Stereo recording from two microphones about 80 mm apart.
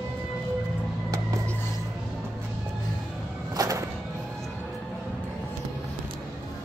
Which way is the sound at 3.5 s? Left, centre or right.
Right.